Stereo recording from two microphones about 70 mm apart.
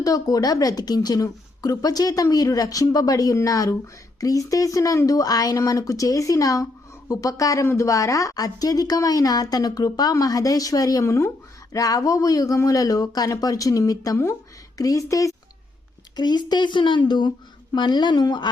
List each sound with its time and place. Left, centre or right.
0.0 s a woman's voice: left
11.7 s a woman's voice: left
16.1 s speech: left